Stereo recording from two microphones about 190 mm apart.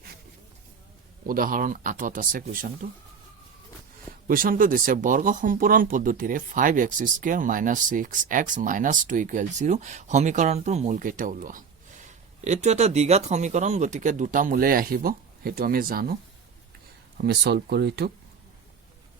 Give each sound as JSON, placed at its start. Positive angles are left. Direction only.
{"t": 1.3, "sound": "speech", "side_deg": -45}
{"t": 4.3, "sound": "speech", "side_deg": -45}
{"t": 17.2, "sound": "speech", "side_deg": -60}